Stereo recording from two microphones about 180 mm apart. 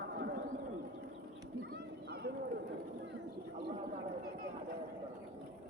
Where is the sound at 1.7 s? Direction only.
65° right (ahead or behind).